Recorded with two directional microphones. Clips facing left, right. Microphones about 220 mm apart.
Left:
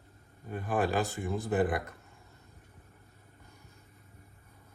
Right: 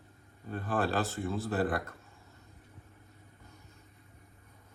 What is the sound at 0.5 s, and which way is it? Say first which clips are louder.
Speech: left 1 dB; 15° left (ahead or behind).